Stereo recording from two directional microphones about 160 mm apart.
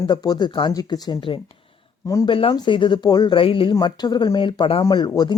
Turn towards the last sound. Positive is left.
turn(degrees=25)  # may be behind; listen again after turning